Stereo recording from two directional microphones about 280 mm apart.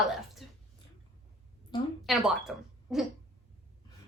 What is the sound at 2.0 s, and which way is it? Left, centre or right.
Speech, centre.